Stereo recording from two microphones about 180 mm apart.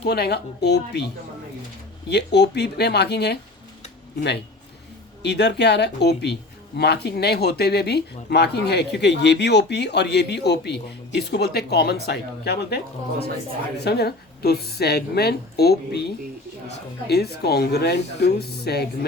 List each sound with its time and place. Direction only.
0.0 s a woman's voice: 65° left (ahead or behind)
2.0 s speech: 70° left (ahead or behind)
5.2 s a woman's voice: 70° left (ahead or behind)